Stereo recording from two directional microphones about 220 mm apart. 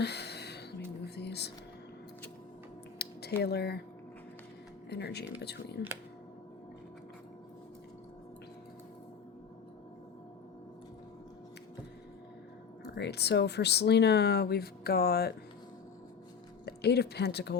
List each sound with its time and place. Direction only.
0.0 s a sound: 50° left (ahead or behind)
1.0 s music: 50° left (ahead or behind)
3.0 s a sound: 45° left (ahead or behind)
4.9 s speech: 50° left (ahead or behind)
12.9 s speech: 50° left (ahead or behind)
16.6 s speech: 45° left (ahead or behind)